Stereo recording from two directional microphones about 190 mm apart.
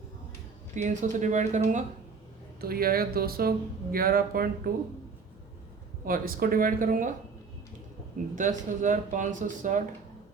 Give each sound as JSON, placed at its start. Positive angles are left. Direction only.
{"t": 0.8, "sound": "speech", "side_deg": -40}
{"t": 2.6, "sound": "speech", "side_deg": -50}
{"t": 6.1, "sound": "speech", "side_deg": -50}
{"t": 8.4, "sound": "speech", "side_deg": -40}